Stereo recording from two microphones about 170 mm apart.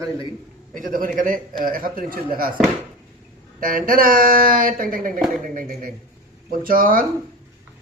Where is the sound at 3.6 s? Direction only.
55° right (ahead or behind).